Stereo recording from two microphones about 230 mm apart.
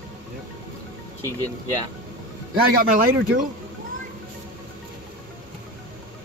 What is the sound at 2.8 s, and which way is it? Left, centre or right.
Speech, right.